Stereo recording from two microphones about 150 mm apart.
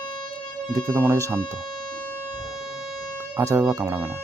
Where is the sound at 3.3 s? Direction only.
20° right (ahead or behind).